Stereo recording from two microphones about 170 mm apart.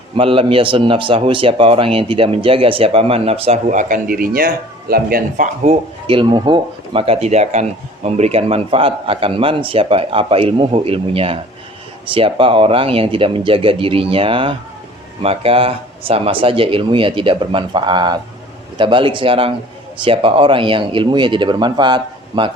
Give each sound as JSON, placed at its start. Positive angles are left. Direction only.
{"t": 0.2, "sound": "speech", "side_deg": -30}
{"t": 5.6, "sound": "speech", "side_deg": -30}